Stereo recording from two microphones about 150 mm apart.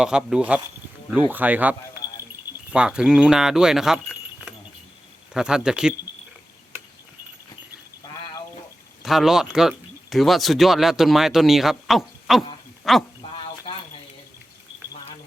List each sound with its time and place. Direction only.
0.0 s speech: 5° right (ahead or behind)
2.7 s speech: 5° right (ahead or behind)
5.3 s speech: 5° right (ahead or behind)
8.1 s a sound: 25° left (ahead or behind)
9.0 s speech: centre (ahead or behind)
12.8 s sheep: centre (ahead or behind)
13.3 s a sound: 40° left (ahead or behind)